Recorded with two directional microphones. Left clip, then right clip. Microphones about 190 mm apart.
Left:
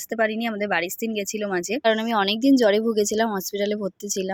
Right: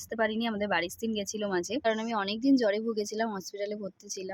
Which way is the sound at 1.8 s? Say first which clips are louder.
Left 12 dB; 30° left (ahead or behind).